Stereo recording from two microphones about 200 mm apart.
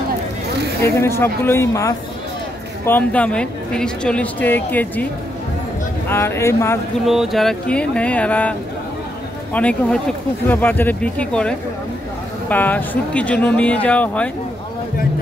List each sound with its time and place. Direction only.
0.8 s speech: 15° left (ahead or behind)
6.0 s speech: 10° left (ahead or behind)
7.1 s a sound: centre (ahead or behind)
9.5 s speech: 5° left (ahead or behind)